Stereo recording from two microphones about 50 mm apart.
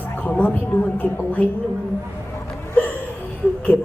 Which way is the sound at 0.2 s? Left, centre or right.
Left.